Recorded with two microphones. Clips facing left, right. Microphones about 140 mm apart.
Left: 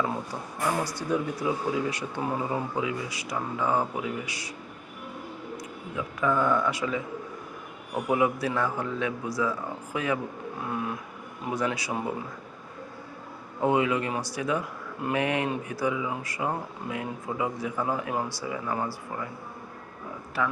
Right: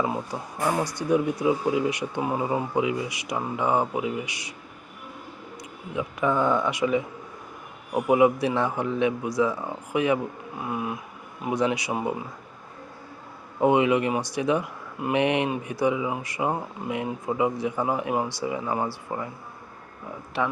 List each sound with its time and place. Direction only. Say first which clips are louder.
1.1 s speech: right 6 dB; 15° right (ahead or behind)
6.0 s speech: right 2 dB; 20° right (ahead or behind)
13.6 s speech: right 4 dB; 20° right (ahead or behind)
20.4 s speech: right 2 dB; 20° right (ahead or behind)